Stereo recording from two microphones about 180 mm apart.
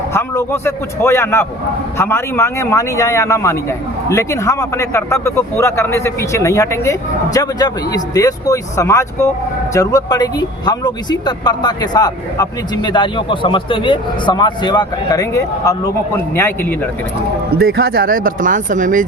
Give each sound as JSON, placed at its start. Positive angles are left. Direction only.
{"t": 0.1, "sound": "a man's voice", "side_deg": 15}
{"t": 17.6, "sound": "speech", "side_deg": -60}